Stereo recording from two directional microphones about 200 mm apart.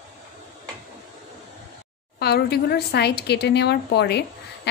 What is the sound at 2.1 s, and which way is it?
A woman's voice, 55° left (ahead or behind).